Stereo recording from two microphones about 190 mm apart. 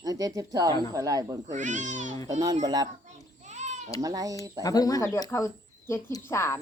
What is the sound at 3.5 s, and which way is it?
Sheep, 35° right (ahead or behind).